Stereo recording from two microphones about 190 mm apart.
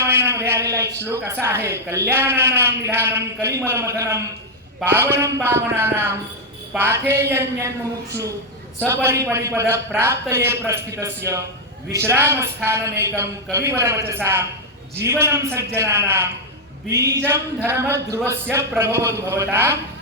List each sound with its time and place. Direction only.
0.0 s a man's voice: 15° right (ahead or behind)
8.9 s a man's voice: 15° right (ahead or behind)